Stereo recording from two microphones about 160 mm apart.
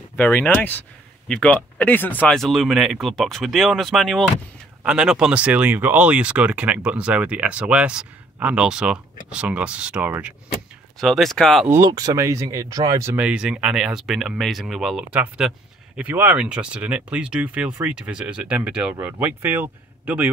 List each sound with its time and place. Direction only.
0.1 s speech: 10° left (ahead or behind); by 10.3 s 10° right (ahead or behind)
11.0 s speech: centre (ahead or behind)
11.7 s speech: 25° right (ahead or behind)